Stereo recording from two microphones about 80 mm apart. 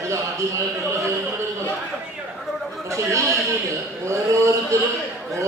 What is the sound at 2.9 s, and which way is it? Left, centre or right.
Speech, right.